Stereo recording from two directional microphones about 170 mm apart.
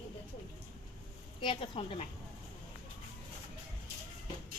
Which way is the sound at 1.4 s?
30° left (ahead or behind).